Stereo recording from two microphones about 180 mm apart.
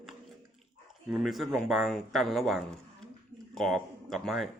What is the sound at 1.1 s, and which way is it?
A man's voice, centre (ahead or behind).